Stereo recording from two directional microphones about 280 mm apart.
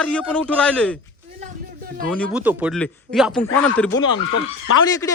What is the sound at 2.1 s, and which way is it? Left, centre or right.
A man's voice, centre.